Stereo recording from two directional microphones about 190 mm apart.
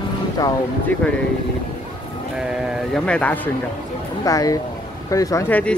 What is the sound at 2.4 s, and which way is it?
Speech, centre (ahead or behind).